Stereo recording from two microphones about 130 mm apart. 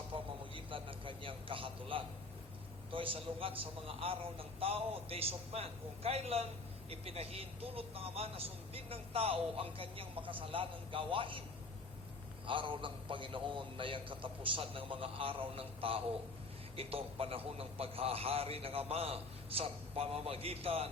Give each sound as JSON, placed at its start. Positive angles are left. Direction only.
{"t": 0.1, "sound": "a man's voice", "side_deg": -40}
{"t": 12.5, "sound": "speech", "side_deg": -40}